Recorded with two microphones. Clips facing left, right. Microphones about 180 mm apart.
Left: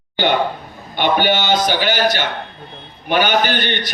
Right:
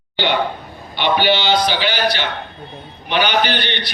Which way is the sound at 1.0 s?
50° left (ahead or behind).